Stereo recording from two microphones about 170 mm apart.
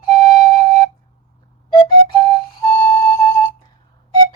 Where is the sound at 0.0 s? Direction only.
25° left (ahead or behind).